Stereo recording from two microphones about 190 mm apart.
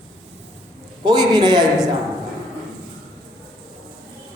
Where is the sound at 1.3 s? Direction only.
20° right (ahead or behind).